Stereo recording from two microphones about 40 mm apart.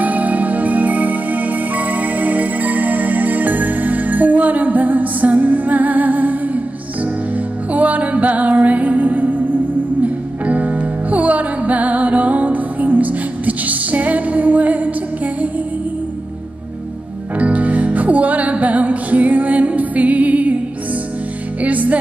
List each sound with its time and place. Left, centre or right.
0.0 s music: right
7.7 s music: right
17.4 s music: right
21.6 s music: right